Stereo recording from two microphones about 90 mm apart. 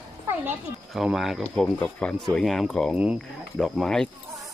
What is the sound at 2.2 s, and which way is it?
Speech, centre (ahead or behind).